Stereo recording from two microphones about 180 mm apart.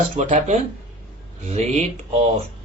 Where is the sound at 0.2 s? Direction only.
40° right (ahead or behind).